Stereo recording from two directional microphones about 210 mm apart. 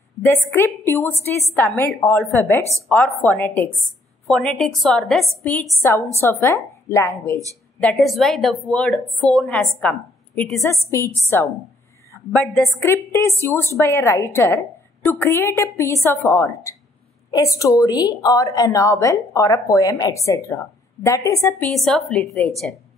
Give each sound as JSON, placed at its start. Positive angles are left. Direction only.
{"t": 0.2, "sound": "a woman's voice", "side_deg": 10}
{"t": 7.8, "sound": "a woman's voice", "side_deg": 0}
{"t": 12.8, "sound": "a woman's voice", "side_deg": 15}
{"t": 21.7, "sound": "a woman's voice", "side_deg": 0}